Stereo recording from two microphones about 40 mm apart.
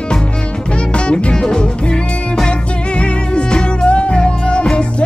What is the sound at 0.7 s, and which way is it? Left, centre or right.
Music, left.